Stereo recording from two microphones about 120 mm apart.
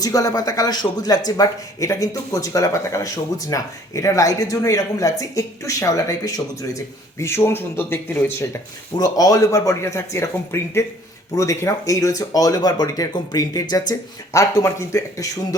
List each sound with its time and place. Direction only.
0.0 s speech: 30° left (ahead or behind)
9.0 s speech: 30° left (ahead or behind)